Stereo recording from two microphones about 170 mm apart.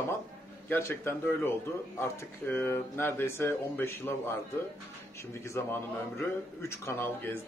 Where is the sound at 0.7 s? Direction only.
15° left (ahead or behind).